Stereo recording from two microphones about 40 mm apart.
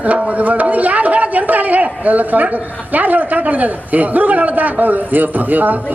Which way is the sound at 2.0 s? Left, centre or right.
Right.